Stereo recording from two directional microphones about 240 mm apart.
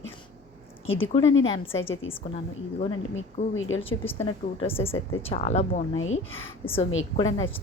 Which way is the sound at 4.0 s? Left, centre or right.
Centre.